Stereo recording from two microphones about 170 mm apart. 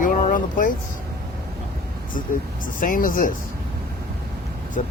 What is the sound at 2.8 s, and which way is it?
Speech, 55° left (ahead or behind).